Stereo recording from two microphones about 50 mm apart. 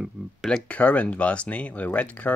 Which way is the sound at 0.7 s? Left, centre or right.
Left.